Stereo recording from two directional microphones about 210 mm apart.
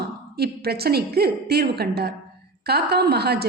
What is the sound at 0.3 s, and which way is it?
A woman's voice, 50° right (ahead or behind).